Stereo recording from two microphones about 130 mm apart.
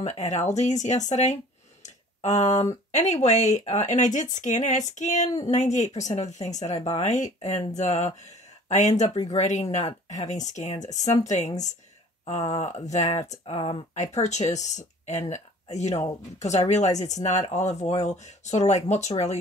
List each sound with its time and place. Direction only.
0.0 s speech: 60° left (ahead or behind)
13.5 s speech: 45° left (ahead or behind)
14.1 s speech: 60° left (ahead or behind)